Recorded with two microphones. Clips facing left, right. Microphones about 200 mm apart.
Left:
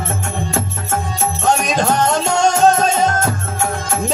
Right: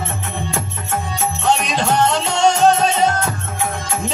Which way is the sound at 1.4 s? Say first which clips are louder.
Left 2 dB; 45° left (ahead or behind).